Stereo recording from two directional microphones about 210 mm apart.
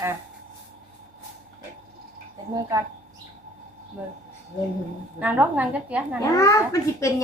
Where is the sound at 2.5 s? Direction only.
15° right (ahead or behind).